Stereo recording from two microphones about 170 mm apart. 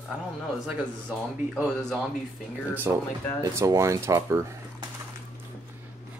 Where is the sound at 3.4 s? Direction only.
20° right (ahead or behind).